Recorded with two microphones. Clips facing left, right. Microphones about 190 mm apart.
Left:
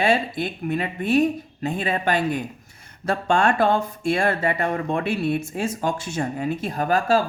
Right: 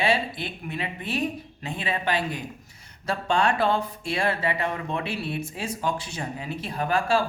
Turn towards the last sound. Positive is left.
turn(degrees=40)  # may be behind; listen again after turning